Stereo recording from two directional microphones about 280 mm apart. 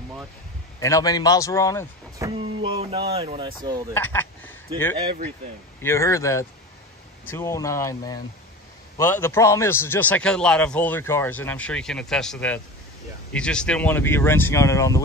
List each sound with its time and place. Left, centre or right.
0.7 s speech: centre
2.1 s a sound: centre
3.1 s speech: right
3.9 s speech: centre
5.8 s a man's voice: centre